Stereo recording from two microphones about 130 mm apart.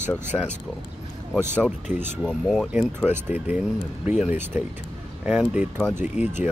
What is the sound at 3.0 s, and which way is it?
Speech, 15° right (ahead or behind).